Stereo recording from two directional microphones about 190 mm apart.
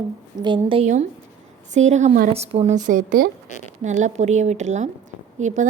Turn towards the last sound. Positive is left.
turn(degrees=-40)  # may be behind; listen again after turning